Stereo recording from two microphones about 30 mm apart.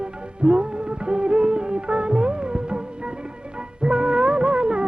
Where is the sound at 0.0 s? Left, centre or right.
Right.